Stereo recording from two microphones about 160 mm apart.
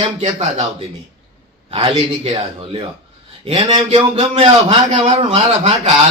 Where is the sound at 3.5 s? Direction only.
35° right (ahead or behind).